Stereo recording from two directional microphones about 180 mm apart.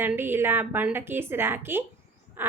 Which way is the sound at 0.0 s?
10° right (ahead or behind).